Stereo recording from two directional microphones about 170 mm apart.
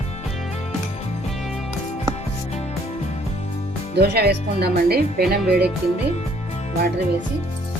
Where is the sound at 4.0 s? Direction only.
70° right (ahead or behind).